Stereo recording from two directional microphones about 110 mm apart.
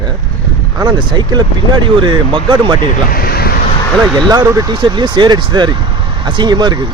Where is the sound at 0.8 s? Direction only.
40° right (ahead or behind).